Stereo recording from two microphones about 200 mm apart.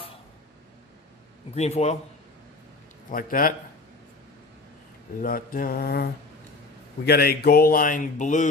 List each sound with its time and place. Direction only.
1.5 s a man's voice: 35° left (ahead or behind)
3.1 s speech: 45° left (ahead or behind)
5.2 s speech: 45° left (ahead or behind)
7.1 s speech: 50° left (ahead or behind)